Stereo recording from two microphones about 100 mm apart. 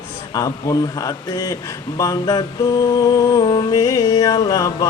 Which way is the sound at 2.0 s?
35° left (ahead or behind).